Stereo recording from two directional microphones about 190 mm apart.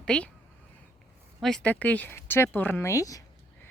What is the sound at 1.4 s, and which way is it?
Speech, centre (ahead or behind).